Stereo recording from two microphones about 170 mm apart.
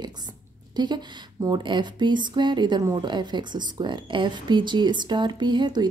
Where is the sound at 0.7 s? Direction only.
25° right (ahead or behind).